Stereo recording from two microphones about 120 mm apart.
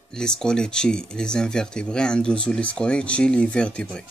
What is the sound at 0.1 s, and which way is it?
Speech, 5° left (ahead or behind).